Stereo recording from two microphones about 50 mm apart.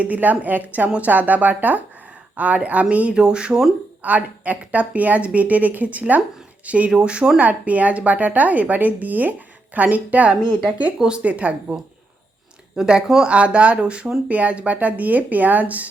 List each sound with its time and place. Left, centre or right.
0.0 s a woman's voice: right
4.0 s a woman's voice: right
7.3 s a woman's voice: right
12.7 s speech: centre
13.2 s a woman's voice: right